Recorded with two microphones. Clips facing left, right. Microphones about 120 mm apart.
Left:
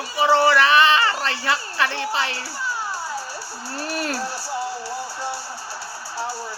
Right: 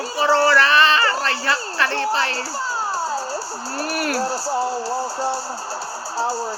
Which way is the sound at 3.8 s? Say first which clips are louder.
Right 2 dB; 20° left (ahead or behind).